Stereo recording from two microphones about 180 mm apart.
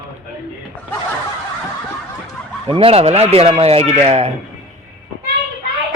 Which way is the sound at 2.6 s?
30° right (ahead or behind).